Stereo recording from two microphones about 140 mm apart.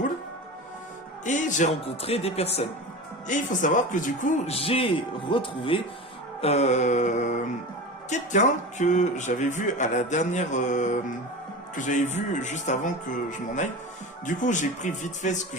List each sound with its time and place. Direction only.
1.2 s speech: 60° left (ahead or behind)
2.0 s speech: 45° left (ahead or behind)
3.2 s speech: 65° left (ahead or behind)
4.4 s speech: 45° left (ahead or behind)
6.4 s speech: 50° left (ahead or behind)
14.3 s speech: 65° left (ahead or behind)